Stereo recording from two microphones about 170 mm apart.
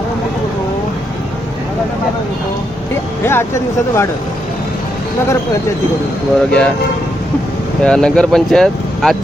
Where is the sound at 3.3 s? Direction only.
15° left (ahead or behind).